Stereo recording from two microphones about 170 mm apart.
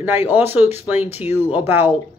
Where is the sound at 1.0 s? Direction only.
40° left (ahead or behind).